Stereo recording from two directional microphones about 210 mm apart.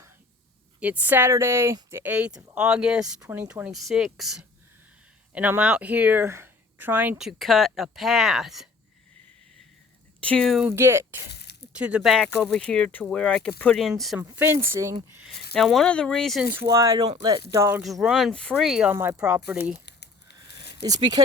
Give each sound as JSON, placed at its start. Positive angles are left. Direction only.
{"t": 0.8, "sound": "speech", "side_deg": -10}
{"t": 10.2, "sound": "speech", "side_deg": 5}
{"t": 10.7, "sound": "speech", "side_deg": -10}
{"t": 14.2, "sound": "speech", "side_deg": -10}
{"t": 15.5, "sound": "speech", "side_deg": 0}
{"t": 19.8, "sound": "a sound", "side_deg": 55}
{"t": 20.8, "sound": "speech", "side_deg": -15}